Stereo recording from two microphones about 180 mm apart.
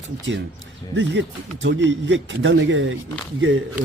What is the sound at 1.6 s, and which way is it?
A man's voice, 80° right.